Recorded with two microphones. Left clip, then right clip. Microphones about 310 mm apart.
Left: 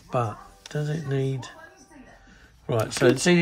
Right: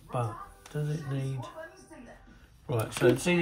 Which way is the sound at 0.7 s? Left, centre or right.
Left.